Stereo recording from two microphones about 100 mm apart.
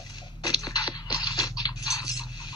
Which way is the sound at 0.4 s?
40° left (ahead or behind).